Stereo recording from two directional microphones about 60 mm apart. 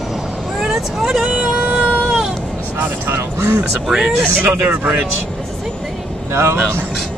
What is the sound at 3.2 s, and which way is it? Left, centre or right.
Music, right.